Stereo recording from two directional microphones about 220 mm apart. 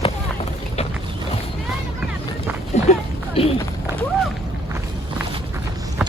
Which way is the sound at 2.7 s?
30° left (ahead or behind).